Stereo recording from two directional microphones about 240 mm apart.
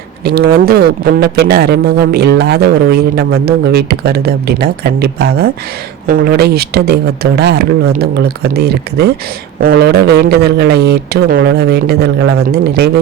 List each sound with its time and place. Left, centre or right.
0.3 s speech: right